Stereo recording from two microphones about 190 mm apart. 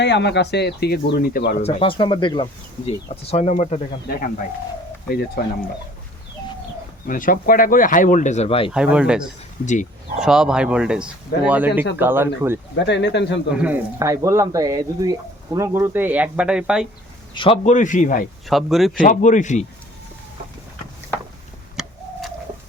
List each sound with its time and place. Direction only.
0.0 s speech: 65° left (ahead or behind)
1.6 s speech: 25° left (ahead or behind)
7.1 s speech: 45° left (ahead or behind); by 8.7 s 30° left (ahead or behind)
8.7 s speech: 5° right (ahead or behind)
12.7 s speech: 65° left (ahead or behind)
13.5 s speech: 5° right (ahead or behind)
17.3 s speech: 30° left (ahead or behind); by 18.3 s 45° left (ahead or behind)
18.4 s speech: centre (ahead or behind)
18.9 s speech: 40° left (ahead or behind)
21.8 s bird: centre (ahead or behind)